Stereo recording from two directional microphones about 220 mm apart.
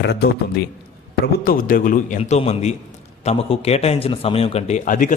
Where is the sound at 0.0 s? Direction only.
50° left (ahead or behind).